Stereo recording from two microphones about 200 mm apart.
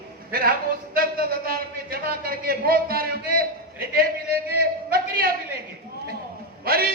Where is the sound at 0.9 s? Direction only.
50° right (ahead or behind).